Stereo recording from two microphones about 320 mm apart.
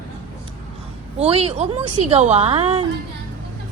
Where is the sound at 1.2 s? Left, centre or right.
Centre.